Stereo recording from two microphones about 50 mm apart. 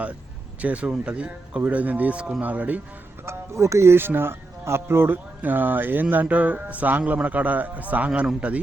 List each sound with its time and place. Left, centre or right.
0.6 s speech: right
3.2 s speech: right
5.4 s speech: right